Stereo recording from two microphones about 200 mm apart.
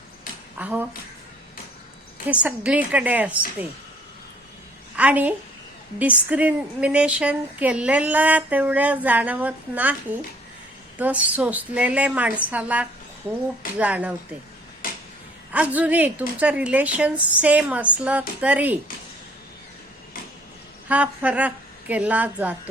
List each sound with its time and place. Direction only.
0.3 s a sound: 45° left (ahead or behind)
0.6 s speech: 10° right (ahead or behind)
2.2 s speech: 5° right (ahead or behind)
4.9 s a woman's voice: 5° right (ahead or behind)
14.8 s a sound: 45° left (ahead or behind)
15.5 s speech: 5° right (ahead or behind)
20.8 s a woman's voice: 5° right (ahead or behind)